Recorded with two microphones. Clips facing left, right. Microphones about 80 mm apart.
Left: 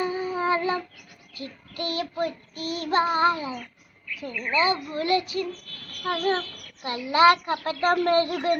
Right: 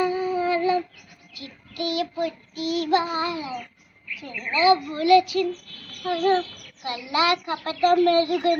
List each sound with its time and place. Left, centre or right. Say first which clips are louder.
0.0 s a sound: right 4 dB; left
0.3 s female singing: right 1 dB; left
1.4 s child singing: right 2 dB; left
4.2 s speech: right 2 dB; left
6.8 s child singing: left 5 dB; left